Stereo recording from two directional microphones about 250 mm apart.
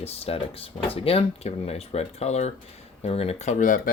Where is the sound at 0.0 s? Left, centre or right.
Left.